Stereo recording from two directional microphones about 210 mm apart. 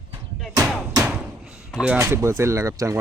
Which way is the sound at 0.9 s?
10° right (ahead or behind).